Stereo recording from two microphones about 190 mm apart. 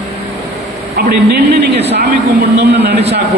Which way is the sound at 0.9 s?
60° right (ahead or behind).